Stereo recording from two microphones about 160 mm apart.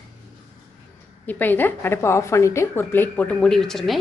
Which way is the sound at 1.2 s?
10° left (ahead or behind).